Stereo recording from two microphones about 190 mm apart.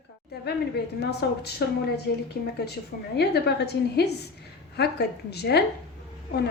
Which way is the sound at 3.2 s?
60° left (ahead or behind).